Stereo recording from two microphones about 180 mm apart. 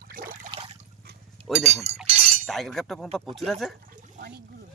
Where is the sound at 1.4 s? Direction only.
30° right (ahead or behind).